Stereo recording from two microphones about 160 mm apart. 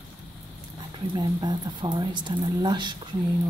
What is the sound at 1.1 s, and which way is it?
Speech, 25° right (ahead or behind).